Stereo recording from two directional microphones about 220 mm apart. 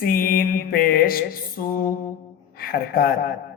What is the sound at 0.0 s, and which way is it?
Mantra, 40° left (ahead or behind).